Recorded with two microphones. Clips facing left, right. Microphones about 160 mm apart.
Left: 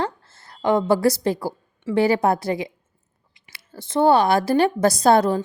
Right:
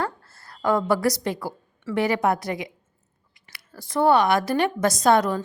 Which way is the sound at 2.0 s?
30° left (ahead or behind).